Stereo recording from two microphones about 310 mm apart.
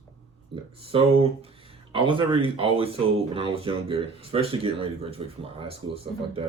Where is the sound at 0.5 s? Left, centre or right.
Centre.